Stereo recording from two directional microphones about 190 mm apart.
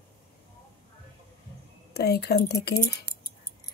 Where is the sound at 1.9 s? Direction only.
60° left (ahead or behind).